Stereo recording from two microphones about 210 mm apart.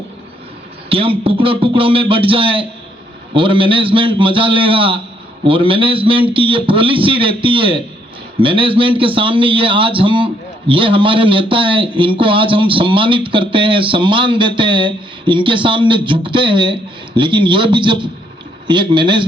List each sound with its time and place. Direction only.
0.9 s a man's voice: 25° right (ahead or behind)